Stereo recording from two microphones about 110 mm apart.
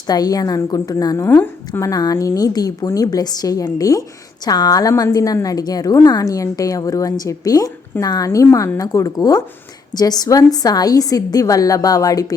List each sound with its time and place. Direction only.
0.1 s a woman's voice: 35° left (ahead or behind)
1.3 s a woman's voice: 20° left (ahead or behind)
1.9 s a woman's voice: 35° left (ahead or behind)